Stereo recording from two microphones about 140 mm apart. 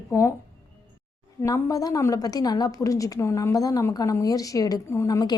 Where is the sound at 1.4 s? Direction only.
25° left (ahead or behind).